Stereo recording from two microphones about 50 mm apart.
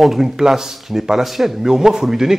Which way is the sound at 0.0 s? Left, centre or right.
Centre.